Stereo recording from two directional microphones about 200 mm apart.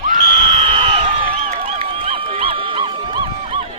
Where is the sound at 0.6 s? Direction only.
25° right (ahead or behind).